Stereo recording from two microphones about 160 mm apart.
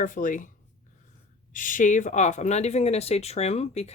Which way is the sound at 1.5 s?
55° left (ahead or behind).